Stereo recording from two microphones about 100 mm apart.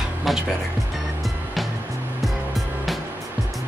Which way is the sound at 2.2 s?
Centre (ahead or behind).